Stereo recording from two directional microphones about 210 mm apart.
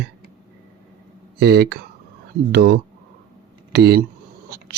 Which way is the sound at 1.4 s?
50° right (ahead or behind).